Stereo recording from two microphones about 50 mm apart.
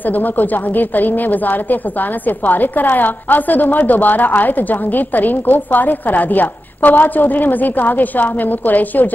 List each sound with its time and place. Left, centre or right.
0.0 s a woman's voice: left